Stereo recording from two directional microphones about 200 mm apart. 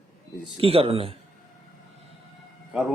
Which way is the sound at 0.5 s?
30° right (ahead or behind).